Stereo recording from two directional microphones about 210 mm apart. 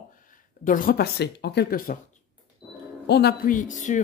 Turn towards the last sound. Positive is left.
turn(degrees=35)  # may be behind; listen again after turning